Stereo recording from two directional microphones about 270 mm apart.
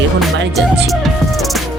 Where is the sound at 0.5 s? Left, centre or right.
Centre.